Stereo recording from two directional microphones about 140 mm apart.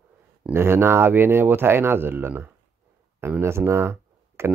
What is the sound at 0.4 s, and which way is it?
Speech, 15° right (ahead or behind).